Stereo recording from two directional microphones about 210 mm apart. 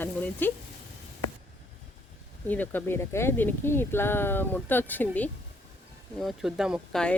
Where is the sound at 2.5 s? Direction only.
10° left (ahead or behind).